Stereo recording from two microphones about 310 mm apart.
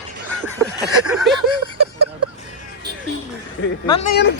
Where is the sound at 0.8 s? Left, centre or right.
Centre.